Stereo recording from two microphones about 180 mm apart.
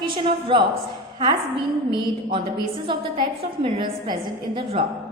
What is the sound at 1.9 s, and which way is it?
A woman's voice, 30° right (ahead or behind).